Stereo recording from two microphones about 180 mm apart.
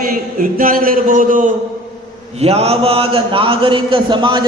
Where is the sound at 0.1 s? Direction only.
50° right (ahead or behind).